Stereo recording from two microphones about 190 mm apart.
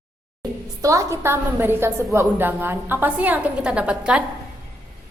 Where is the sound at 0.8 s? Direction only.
15° right (ahead or behind).